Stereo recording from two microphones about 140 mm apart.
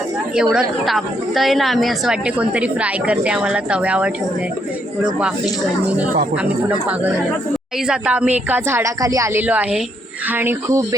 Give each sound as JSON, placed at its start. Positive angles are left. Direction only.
{"t": 0.3, "sound": "a woman's voice", "side_deg": -5}
{"t": 6.3, "sound": "a woman's voice", "side_deg": -10}
{"t": 9.5, "sound": "a woman's voice", "side_deg": -10}